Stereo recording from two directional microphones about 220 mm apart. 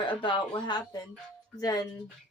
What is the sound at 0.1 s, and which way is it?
Speech, 20° left (ahead or behind).